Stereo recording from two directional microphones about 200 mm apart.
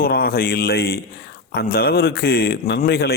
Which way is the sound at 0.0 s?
50° left (ahead or behind).